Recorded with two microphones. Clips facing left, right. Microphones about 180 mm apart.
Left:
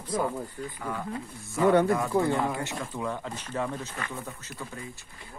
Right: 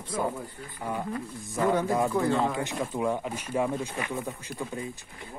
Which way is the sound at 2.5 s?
15° right (ahead or behind).